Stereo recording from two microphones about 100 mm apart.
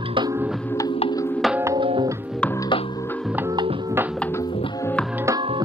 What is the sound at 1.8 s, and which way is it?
Music, 60° right (ahead or behind).